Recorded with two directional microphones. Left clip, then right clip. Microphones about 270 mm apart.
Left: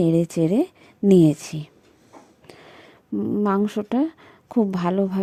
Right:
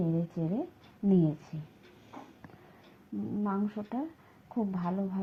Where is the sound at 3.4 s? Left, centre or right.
Left.